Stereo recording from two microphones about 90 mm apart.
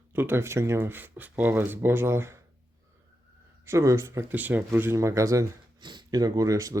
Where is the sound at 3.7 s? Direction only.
35° right (ahead or behind).